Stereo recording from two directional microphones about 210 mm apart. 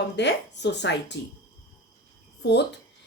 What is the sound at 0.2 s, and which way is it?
A woman's voice, 55° left (ahead or behind).